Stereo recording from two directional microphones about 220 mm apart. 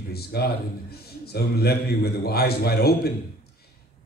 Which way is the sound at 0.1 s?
45° left (ahead or behind).